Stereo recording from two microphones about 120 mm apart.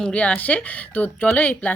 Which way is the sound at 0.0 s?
10° left (ahead or behind).